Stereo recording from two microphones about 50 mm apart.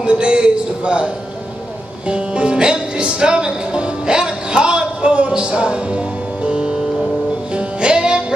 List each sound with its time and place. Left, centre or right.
0.0 s a man's voice: right
2.0 s music: right